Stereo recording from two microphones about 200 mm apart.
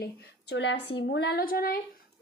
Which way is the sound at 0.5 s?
65° left (ahead or behind).